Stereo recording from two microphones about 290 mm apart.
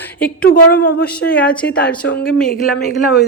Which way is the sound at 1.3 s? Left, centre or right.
Centre.